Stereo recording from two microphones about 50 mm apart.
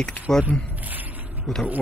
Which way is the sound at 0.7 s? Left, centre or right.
Right.